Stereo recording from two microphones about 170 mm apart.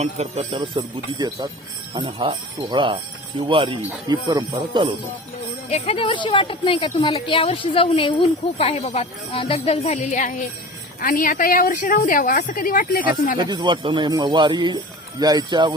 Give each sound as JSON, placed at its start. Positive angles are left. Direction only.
{"t": 0.0, "sound": "speech", "side_deg": -40}
{"t": 5.6, "sound": "a woman's voice", "side_deg": 40}
{"t": 13.4, "sound": "speech", "side_deg": -25}